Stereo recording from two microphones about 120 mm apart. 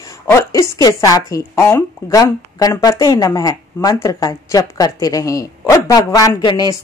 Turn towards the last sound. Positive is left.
turn(degrees=35)  # may be behind; listen again after turning